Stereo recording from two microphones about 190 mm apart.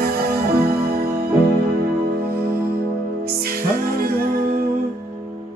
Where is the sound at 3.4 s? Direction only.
50° right (ahead or behind).